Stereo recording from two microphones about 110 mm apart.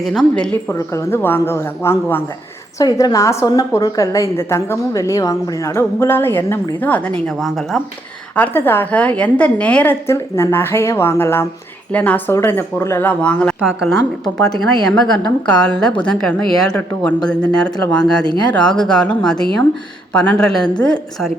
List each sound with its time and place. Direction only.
0.0 s speech: 5° left (ahead or behind)
0.7 s a woman's voice: 25° left (ahead or behind)
2.7 s a woman's voice: 35° left (ahead or behind); by 7.8 s 5° left (ahead or behind)
8.4 s a woman's voice: 20° left (ahead or behind)
13.6 s speech: 5° right (ahead or behind)